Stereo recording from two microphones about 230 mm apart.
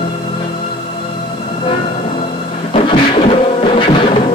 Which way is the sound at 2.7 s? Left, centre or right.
Left.